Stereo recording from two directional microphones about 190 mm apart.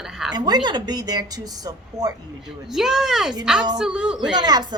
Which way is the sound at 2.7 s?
Centre (ahead or behind).